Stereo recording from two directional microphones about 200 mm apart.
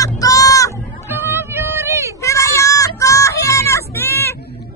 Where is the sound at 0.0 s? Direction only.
15° left (ahead or behind).